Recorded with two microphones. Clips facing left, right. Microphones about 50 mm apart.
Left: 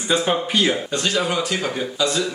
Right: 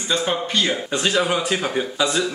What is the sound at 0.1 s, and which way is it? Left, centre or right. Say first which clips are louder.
Speech: left 2 dB; centre.